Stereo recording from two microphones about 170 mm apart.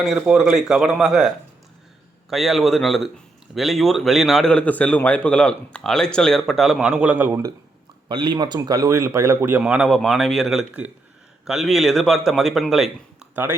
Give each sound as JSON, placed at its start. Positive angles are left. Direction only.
{"t": 0.0, "sound": "a man's voice", "side_deg": 0}
{"t": 2.3, "sound": "a man's voice", "side_deg": 0}
{"t": 8.0, "sound": "speech", "side_deg": -25}
{"t": 9.6, "sound": "a man's voice", "side_deg": -5}